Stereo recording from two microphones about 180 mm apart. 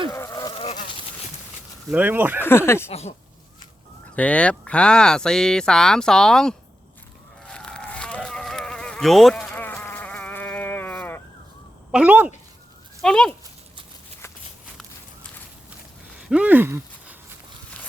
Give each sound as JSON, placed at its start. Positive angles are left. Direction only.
{"t": 0.1, "sound": "insect", "side_deg": 20}
{"t": 1.9, "sound": "speech", "side_deg": -10}
{"t": 2.4, "sound": "speech", "side_deg": 15}
{"t": 2.9, "sound": "speech", "side_deg": 35}
{"t": 4.1, "sound": "speech", "side_deg": 5}
{"t": 7.4, "sound": "livestock", "side_deg": 5}
{"t": 11.9, "sound": "speech", "side_deg": -5}
{"t": 13.0, "sound": "speech", "side_deg": 5}
{"t": 16.3, "sound": "speech", "side_deg": -10}